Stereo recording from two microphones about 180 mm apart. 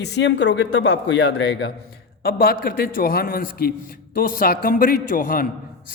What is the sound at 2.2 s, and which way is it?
A man's voice, 55° left (ahead or behind).